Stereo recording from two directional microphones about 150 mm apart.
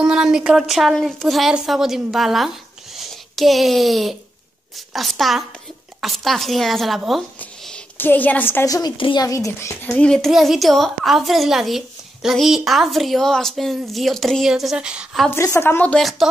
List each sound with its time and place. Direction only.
0.0 s a woman's voice: 5° right (ahead or behind); by 9.8 s 20° left (ahead or behind)
9.8 s a woman's voice: 5° left (ahead or behind)
15.3 s speech: 20° left (ahead or behind); by 16.3 s centre (ahead or behind)